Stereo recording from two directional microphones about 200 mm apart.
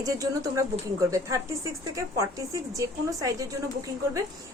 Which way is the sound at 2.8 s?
15° right (ahead or behind).